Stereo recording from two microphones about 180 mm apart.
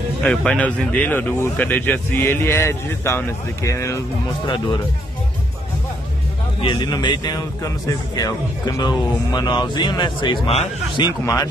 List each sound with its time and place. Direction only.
0.2 s speech: 5° left (ahead or behind)
6.6 s speech: 25° left (ahead or behind)
11.1 s speech: 20° left (ahead or behind)